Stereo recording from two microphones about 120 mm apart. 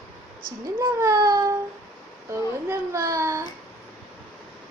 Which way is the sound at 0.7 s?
30° right (ahead or behind).